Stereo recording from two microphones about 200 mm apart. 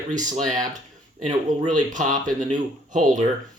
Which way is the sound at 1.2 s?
40° right (ahead or behind).